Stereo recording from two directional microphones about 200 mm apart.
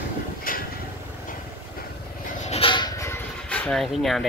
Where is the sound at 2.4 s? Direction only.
25° left (ahead or behind); by 4.2 s centre (ahead or behind).